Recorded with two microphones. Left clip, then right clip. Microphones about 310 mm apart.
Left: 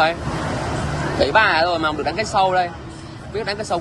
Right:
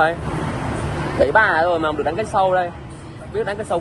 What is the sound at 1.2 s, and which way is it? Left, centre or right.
Speech, centre.